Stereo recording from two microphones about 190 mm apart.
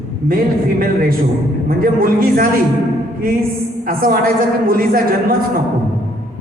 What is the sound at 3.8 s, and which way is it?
Speech, 50° right (ahead or behind).